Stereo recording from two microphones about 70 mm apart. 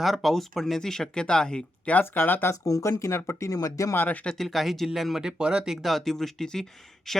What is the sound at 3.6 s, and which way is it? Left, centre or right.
Speech, left.